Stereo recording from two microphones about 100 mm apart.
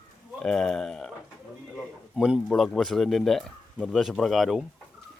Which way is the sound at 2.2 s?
5° right (ahead or behind).